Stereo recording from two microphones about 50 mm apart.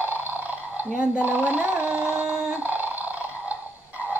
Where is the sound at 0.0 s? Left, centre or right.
Right.